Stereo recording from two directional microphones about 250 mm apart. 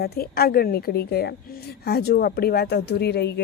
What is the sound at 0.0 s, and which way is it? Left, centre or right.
A woman's voice, left.